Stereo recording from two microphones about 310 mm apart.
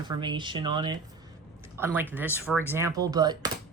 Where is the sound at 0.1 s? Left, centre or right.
Centre.